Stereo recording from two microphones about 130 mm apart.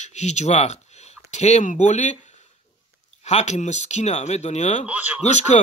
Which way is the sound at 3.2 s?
60° left (ahead or behind).